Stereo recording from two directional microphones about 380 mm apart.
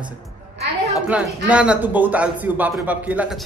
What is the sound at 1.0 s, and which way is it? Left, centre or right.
Speech, centre.